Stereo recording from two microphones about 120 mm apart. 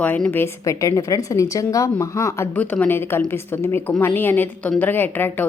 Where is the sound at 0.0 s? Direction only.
10° left (ahead or behind).